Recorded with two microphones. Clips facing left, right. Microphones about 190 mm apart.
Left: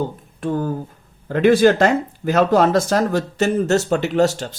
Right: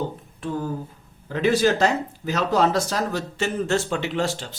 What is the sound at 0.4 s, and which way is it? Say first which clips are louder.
Speech: left 6 dB; 50° left (ahead or behind).